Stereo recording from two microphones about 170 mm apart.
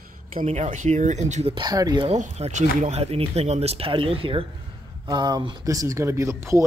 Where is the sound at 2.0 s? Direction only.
40° right (ahead or behind); by 6.7 s 15° right (ahead or behind).